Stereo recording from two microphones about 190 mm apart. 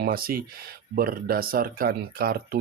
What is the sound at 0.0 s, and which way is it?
Speech, 50° right (ahead or behind).